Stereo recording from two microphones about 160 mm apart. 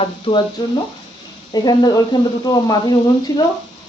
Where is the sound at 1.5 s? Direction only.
25° left (ahead or behind).